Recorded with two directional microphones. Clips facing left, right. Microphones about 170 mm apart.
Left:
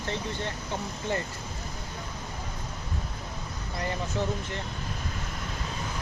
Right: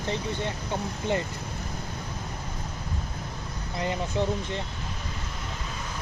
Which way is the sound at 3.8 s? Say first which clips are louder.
Right 3 dB; 20° right (ahead or behind).